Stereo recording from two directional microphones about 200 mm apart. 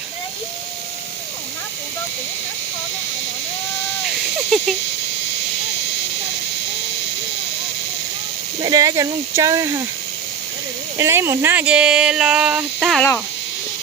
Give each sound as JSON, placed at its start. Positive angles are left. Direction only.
{"t": 4.4, "sound": "a sound", "side_deg": 0}
{"t": 8.6, "sound": "speech", "side_deg": -20}
{"t": 10.9, "sound": "speech", "side_deg": -15}